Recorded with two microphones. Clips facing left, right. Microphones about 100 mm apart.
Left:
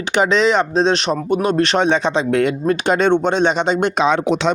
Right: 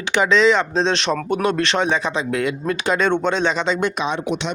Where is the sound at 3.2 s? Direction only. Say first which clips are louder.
Left 3 dB; 60° left (ahead or behind); by 4.3 s 90° left.